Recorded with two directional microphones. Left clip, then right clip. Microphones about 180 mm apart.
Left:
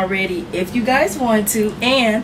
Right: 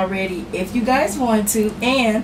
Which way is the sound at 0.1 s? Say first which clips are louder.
Left 3 dB; centre (ahead or behind).